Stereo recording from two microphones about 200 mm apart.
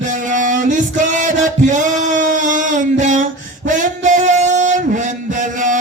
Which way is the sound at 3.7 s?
40° right (ahead or behind).